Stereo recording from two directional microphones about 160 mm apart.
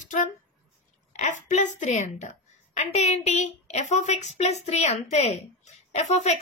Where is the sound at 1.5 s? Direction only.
50° left (ahead or behind).